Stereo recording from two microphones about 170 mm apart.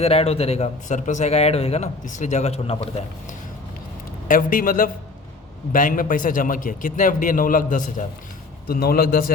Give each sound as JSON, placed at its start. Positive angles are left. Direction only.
{"t": 0.0, "sound": "a man's voice", "side_deg": 35}
{"t": 4.3, "sound": "a man's voice", "side_deg": 55}
{"t": 8.6, "sound": "a man's voice", "side_deg": 60}